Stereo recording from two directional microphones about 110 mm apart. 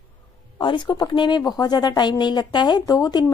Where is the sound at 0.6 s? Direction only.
45° left (ahead or behind).